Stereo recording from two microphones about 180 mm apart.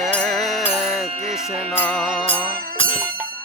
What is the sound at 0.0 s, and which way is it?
Music, centre (ahead or behind).